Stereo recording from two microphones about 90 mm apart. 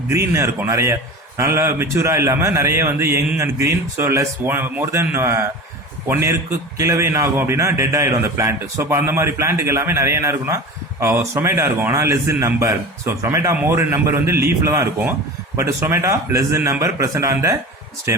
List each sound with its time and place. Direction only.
0.1 s a man's voice: 30° right (ahead or behind)